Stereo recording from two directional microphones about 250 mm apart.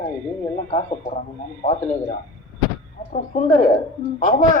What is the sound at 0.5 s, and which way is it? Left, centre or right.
Speech, left.